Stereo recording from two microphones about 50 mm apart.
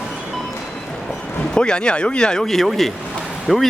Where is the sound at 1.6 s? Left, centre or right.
Centre.